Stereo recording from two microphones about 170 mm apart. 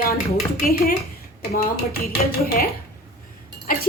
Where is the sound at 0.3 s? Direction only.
65° left (ahead or behind).